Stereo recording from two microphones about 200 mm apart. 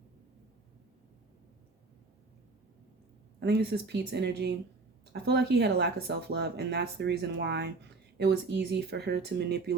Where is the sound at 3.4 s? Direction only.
55° right (ahead or behind).